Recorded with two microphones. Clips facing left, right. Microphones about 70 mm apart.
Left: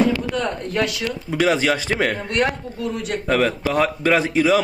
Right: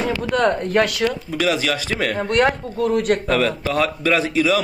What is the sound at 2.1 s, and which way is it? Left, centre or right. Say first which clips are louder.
Speech: right 4 dB; right.